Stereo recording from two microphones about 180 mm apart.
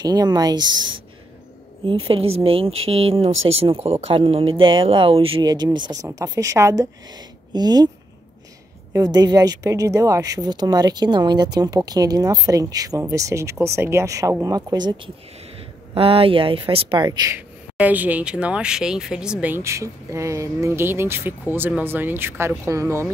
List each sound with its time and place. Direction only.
0.0 s a woman's voice: 20° right (ahead or behind)
1.9 s a woman's voice: 30° right (ahead or behind)
8.9 s a woman's voice: 20° right (ahead or behind)
17.7 s speech: 10° right (ahead or behind)